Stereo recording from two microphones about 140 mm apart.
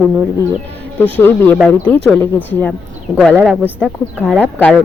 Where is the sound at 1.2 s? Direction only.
15° left (ahead or behind).